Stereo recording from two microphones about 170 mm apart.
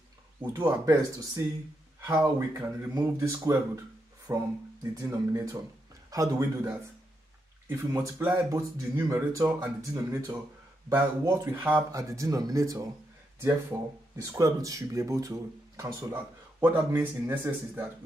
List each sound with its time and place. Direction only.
0.5 s speech: 15° right (ahead or behind)
11.6 s speech: 15° right (ahead or behind)